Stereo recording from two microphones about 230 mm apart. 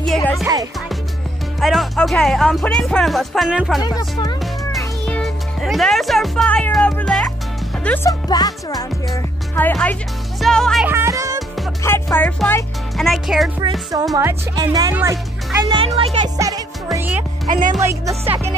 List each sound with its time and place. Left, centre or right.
0.0 s music: centre
1.6 s speech: centre
4.4 s music: centre
7.8 s speech: centre
10.4 s music: centre
11.8 s speech: centre
13.6 s speech: centre
15.7 s speech: right
16.3 s music: centre
17.5 s speech: right